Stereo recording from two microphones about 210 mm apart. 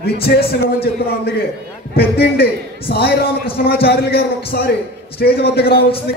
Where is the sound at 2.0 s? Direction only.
50° left (ahead or behind).